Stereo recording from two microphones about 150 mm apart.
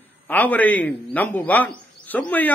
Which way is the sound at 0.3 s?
10° left (ahead or behind).